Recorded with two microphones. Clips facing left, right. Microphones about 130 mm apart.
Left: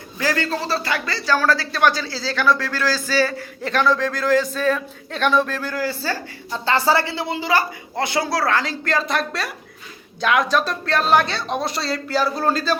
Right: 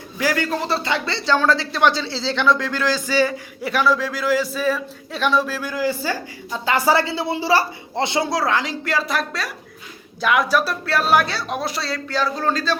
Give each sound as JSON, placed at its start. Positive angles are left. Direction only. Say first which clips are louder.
{"t": 0.2, "sound": "speech", "louder": "right 1 dB", "side_deg": -10}
{"t": 7.3, "sound": "speech", "louder": "right 2 dB", "side_deg": -30}